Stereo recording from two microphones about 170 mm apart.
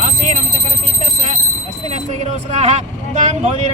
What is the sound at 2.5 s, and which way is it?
Speech, 40° right (ahead or behind).